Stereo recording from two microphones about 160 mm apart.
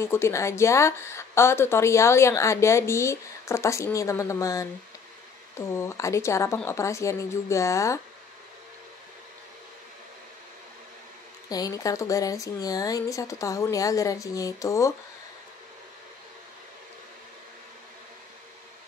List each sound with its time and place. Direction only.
0.0 s a woman's voice: 15° left (ahead or behind)
5.7 s a woman's voice: 15° left (ahead or behind)
11.4 s speech: 25° left (ahead or behind)